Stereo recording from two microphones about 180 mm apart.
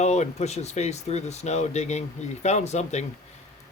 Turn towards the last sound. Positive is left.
turn(degrees=40)  # may be behind; listen again after turning